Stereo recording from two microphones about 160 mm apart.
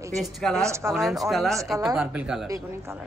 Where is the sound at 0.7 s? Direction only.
15° right (ahead or behind).